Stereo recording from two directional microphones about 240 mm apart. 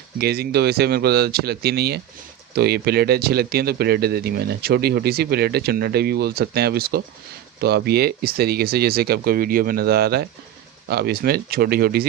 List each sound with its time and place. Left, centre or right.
0.2 s a man's voice: right